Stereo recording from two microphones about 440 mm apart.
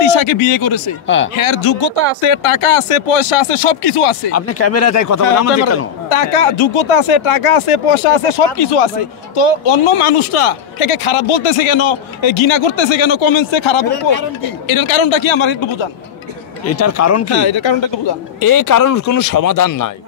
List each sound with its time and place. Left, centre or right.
1.0 s speech: left
1.4 s speech: left
4.3 s speech: left
6.0 s a man's voice: left
14.7 s speech: left
16.7 s speech: left
17.3 s speech: left
18.4 s speech: left